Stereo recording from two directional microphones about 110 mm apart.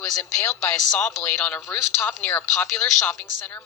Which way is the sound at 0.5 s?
10° left (ahead or behind).